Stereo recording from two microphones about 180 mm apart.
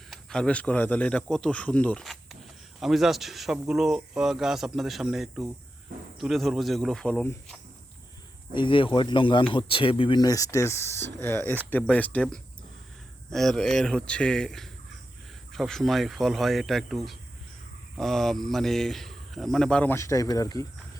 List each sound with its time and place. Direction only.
0.1 s speech: 5° left (ahead or behind)
8.5 s speech: 25° left (ahead or behind)